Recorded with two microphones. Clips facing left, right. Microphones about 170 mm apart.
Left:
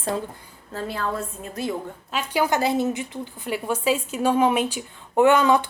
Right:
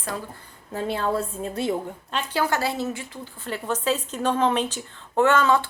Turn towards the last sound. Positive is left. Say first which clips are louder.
# left 2 dB
turn(degrees=15)  # may be behind; listen again after turning